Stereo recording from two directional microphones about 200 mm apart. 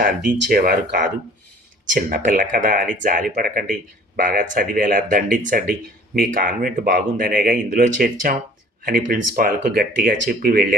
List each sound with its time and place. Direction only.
0.0 s speech: 45° right (ahead or behind)